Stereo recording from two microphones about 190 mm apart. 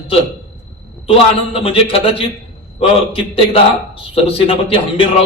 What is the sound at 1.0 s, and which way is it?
A man's voice, 30° left (ahead or behind).